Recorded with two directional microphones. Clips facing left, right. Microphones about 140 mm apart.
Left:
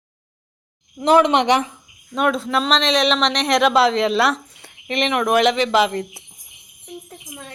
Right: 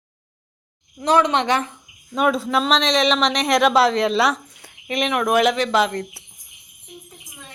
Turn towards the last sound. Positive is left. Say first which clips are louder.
# left 2 dB
turn(degrees=5)  # may be behind; listen again after turning